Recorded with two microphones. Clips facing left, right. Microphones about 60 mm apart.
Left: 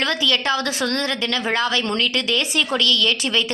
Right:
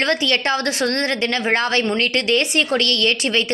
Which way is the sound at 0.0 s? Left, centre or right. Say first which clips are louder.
Right 2 dB; right.